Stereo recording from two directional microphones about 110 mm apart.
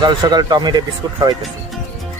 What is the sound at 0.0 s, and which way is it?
Speech, 40° right (ahead or behind).